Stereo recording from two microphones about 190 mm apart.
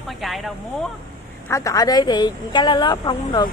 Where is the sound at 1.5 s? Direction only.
15° left (ahead or behind).